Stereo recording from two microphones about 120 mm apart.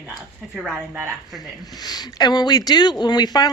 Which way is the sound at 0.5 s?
5° right (ahead or behind).